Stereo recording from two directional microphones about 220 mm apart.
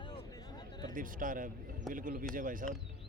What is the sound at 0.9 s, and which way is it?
Speech, 40° right (ahead or behind).